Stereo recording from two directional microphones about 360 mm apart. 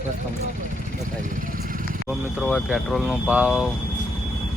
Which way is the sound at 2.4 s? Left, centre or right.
Centre.